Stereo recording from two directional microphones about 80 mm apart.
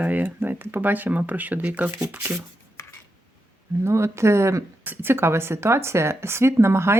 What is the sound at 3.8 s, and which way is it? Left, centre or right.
Speech, right.